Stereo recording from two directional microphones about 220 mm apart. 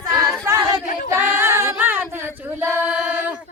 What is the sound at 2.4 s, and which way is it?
Female singing, 10° right (ahead or behind).